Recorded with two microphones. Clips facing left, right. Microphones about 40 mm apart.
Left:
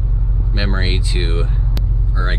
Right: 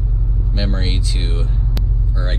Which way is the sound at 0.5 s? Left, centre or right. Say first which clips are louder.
Left 3 dB; left.